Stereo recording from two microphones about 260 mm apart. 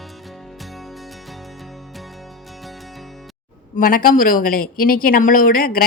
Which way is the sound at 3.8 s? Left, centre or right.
Left.